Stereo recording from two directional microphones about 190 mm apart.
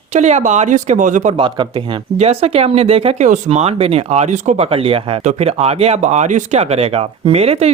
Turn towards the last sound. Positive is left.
turn(degrees=-35)  # may be behind; listen again after turning